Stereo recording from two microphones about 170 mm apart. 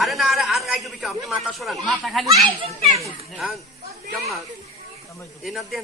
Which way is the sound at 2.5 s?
35° right (ahead or behind).